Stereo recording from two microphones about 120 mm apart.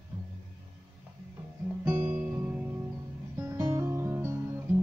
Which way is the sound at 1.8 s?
20° right (ahead or behind).